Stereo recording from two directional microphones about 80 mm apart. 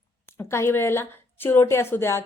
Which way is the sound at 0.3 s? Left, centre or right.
Left.